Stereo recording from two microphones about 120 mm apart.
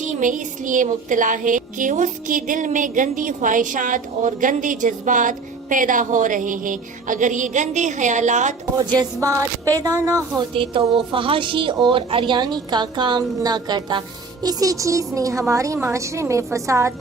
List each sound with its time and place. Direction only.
0.0 s child singing: 90° right
8.7 s a woman's voice: 35° right (ahead or behind)
10.5 s a woman's voice: 45° right (ahead or behind); by 16.9 s 25° right (ahead or behind)